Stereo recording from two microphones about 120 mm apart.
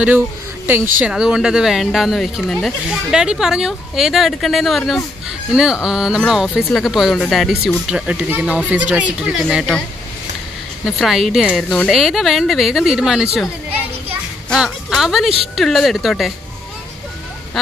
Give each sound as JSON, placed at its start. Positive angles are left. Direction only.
{"t": 0.7, "sound": "speech", "side_deg": -15}
{"t": 1.1, "sound": "a woman's voice", "side_deg": -5}
{"t": 10.9, "sound": "a woman's voice", "side_deg": 0}
{"t": 14.5, "sound": "a woman's voice", "side_deg": 0}